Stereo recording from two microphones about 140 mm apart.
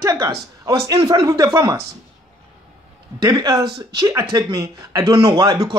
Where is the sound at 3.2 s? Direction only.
30° right (ahead or behind).